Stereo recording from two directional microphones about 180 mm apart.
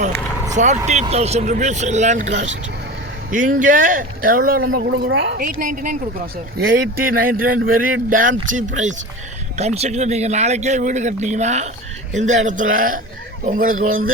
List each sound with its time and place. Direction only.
0.5 s speech: 40° right (ahead or behind)
4.9 s speech: 75° right (ahead or behind)
5.4 s speech: 50° right (ahead or behind)